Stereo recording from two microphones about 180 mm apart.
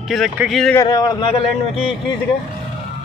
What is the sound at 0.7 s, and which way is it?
Speech, 25° left (ahead or behind).